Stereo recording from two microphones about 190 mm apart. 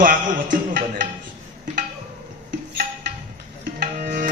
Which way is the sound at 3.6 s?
50° right (ahead or behind).